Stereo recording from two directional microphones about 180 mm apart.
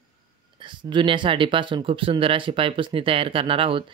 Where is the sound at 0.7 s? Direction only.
25° right (ahead or behind).